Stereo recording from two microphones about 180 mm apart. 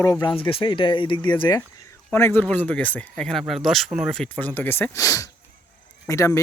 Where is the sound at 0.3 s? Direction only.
30° left (ahead or behind).